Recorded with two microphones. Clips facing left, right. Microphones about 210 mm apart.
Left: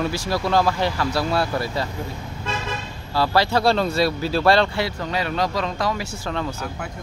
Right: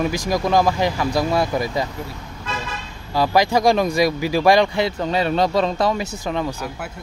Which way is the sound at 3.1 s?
15° right (ahead or behind).